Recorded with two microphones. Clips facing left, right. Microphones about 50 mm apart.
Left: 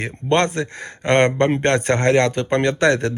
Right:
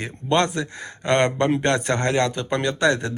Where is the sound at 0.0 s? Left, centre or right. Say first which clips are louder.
Left 3 dB; left.